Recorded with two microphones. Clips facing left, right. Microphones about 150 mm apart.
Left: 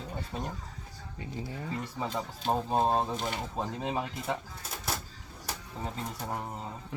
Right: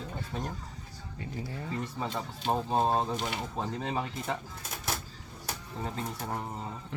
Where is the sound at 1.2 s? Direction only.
15° left (ahead or behind).